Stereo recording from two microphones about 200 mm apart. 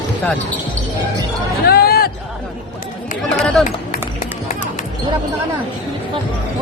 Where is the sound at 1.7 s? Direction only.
50° left (ahead or behind).